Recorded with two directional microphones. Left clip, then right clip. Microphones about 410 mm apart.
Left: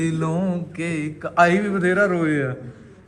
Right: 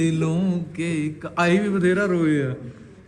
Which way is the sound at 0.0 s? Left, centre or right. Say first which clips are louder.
Even; centre.